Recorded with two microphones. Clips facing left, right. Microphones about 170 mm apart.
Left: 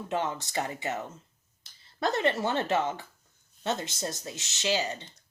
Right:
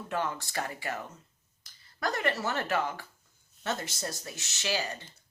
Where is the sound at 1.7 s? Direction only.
25° left (ahead or behind).